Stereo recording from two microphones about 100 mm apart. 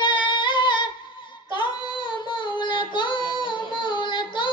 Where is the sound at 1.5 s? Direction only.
50° left (ahead or behind).